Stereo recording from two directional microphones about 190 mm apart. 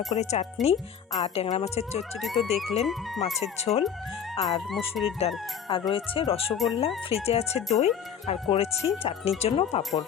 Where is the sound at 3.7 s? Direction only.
35° left (ahead or behind).